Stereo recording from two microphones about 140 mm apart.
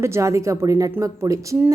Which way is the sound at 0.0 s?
20° right (ahead or behind).